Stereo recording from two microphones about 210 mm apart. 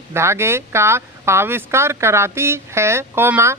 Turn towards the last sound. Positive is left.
turn(degrees=-10)  # may be behind; listen again after turning